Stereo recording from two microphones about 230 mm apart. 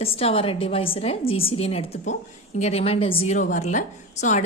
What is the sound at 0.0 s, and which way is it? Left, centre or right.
A woman's voice, left.